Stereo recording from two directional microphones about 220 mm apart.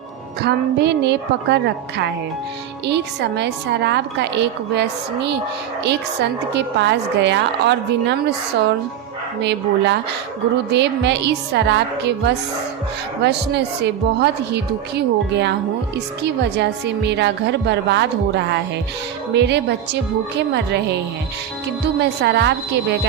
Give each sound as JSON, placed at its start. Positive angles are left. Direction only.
{"t": 0.4, "sound": "a woman's voice", "side_deg": -50}
{"t": 6.5, "sound": "a woman's voice", "side_deg": -50}
{"t": 9.4, "sound": "a woman's voice", "side_deg": -50}